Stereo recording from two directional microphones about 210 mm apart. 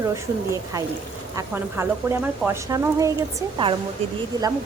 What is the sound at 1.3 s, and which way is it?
Cutlery, 10° right (ahead or behind).